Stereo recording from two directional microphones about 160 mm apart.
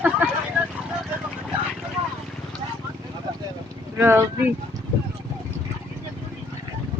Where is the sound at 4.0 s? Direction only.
15° right (ahead or behind).